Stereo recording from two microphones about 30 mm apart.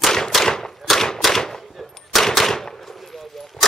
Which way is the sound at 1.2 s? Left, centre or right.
Centre.